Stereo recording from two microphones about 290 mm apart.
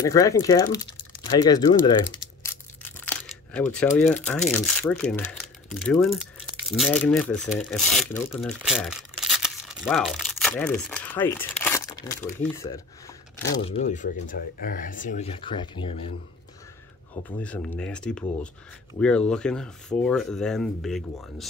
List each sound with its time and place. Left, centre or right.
0.0 s speech: centre
4.0 s speech: centre
13.6 s speech: left
17.1 s speech: centre